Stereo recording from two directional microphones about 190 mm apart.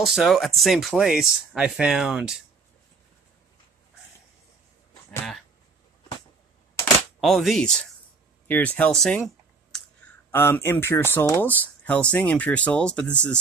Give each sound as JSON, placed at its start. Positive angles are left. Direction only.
{"t": 0.0, "sound": "speech", "side_deg": 0}
{"t": 7.2, "sound": "speech", "side_deg": 0}
{"t": 10.3, "sound": "speech", "side_deg": 10}